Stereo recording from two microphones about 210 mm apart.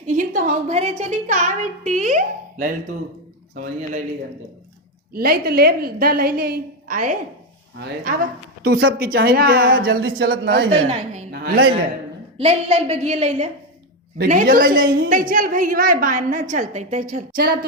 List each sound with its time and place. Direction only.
0.0 s a woman's voice: 35° right (ahead or behind)
5.1 s a woman's voice: 45° right (ahead or behind)
10.7 s a woman's voice: 35° right (ahead or behind)
12.4 s a woman's voice: 30° right (ahead or behind); by 17.7 s 45° right (ahead or behind)